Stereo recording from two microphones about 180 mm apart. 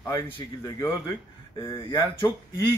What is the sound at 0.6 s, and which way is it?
Speech, 20° left (ahead or behind).